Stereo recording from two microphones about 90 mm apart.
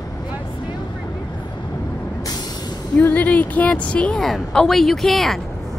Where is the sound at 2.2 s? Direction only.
45° left (ahead or behind).